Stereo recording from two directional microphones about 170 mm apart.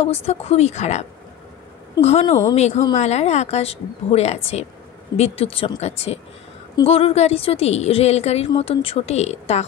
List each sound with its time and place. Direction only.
0.0 s a woman's voice: 35° left (ahead or behind)
2.0 s a woman's voice: 40° left (ahead or behind)